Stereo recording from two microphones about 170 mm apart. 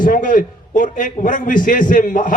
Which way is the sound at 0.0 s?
50° left (ahead or behind).